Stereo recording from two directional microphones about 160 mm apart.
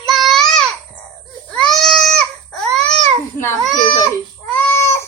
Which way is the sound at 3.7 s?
25° left (ahead or behind).